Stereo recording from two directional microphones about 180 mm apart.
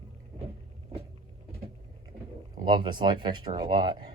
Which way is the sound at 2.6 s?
25° right (ahead or behind).